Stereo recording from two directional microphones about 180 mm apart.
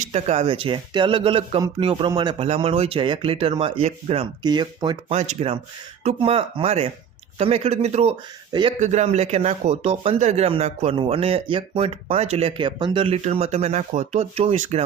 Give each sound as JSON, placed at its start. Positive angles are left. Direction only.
{"t": 0.0, "sound": "speech", "side_deg": -35}
{"t": 5.1, "sound": "speech", "side_deg": -40}